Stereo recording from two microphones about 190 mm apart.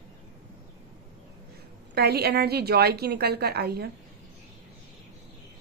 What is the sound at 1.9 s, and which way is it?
A woman's voice, 55° right (ahead or behind).